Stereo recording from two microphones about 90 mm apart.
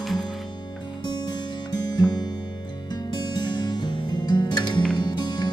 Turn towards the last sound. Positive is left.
turn(degrees=55)  # may be behind; listen again after turning